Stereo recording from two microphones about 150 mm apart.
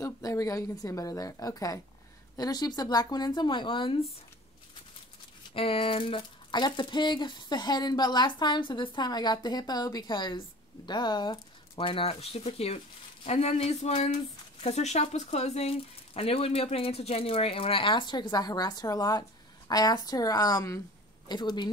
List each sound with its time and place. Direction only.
0.0 s speech: 20° left (ahead or behind)
5.5 s speech: 40° left (ahead or behind)